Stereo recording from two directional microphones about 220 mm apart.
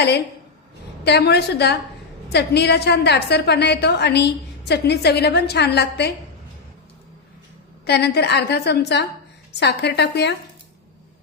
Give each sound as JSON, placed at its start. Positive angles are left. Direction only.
{"t": 1.0, "sound": "a woman's voice", "side_deg": 50}
{"t": 7.9, "sound": "a woman's voice", "side_deg": 50}